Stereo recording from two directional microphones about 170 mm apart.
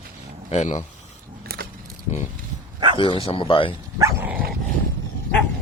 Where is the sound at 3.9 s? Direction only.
15° right (ahead or behind).